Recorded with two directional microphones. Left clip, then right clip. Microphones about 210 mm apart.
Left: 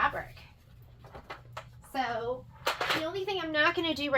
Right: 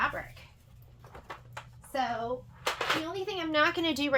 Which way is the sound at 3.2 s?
50° right (ahead or behind).